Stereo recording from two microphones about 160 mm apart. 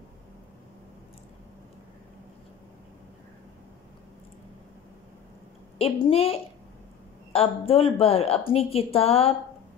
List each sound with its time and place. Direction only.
5.8 s a woman's voice: 35° left (ahead or behind)
7.3 s a woman's voice: 35° left (ahead or behind)